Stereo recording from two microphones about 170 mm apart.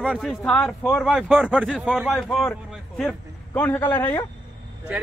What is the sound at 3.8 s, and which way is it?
Speech, 25° left (ahead or behind).